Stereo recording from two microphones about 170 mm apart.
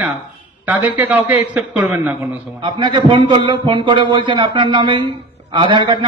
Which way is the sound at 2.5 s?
25° right (ahead or behind).